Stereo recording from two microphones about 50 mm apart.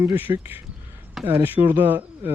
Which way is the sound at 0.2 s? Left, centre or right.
Right.